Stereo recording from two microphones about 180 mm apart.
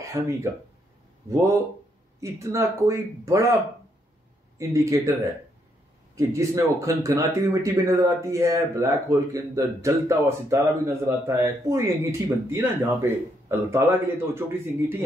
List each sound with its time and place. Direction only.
0.0 s speech: 15° right (ahead or behind)
4.6 s speech: 15° right (ahead or behind)